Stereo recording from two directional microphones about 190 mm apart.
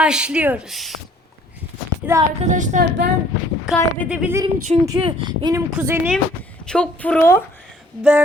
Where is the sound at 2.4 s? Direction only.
40° right (ahead or behind).